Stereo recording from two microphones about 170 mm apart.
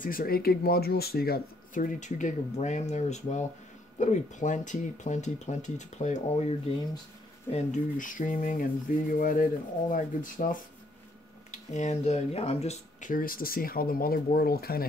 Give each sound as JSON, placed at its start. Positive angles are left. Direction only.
{"t": 0.0, "sound": "speech", "side_deg": 55}
{"t": 7.5, "sound": "speech", "side_deg": 50}
{"t": 13.1, "sound": "speech", "side_deg": 55}